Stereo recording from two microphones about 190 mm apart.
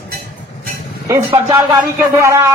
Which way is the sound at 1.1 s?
20° right (ahead or behind).